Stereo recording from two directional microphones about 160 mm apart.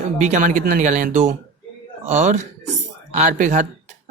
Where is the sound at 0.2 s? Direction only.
45° right (ahead or behind).